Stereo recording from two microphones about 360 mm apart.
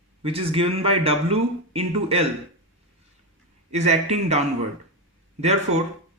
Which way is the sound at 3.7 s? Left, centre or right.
Centre.